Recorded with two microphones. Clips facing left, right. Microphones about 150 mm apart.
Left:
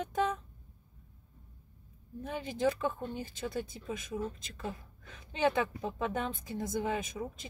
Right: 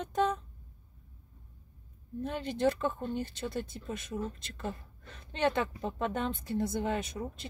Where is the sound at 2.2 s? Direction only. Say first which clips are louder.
Right 2 dB; 10° left (ahead or behind).